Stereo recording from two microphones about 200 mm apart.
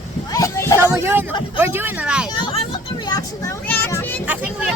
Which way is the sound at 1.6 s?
10° right (ahead or behind).